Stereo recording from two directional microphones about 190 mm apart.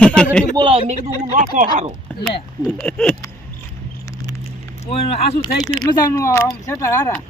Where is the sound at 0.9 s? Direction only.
40° right (ahead or behind).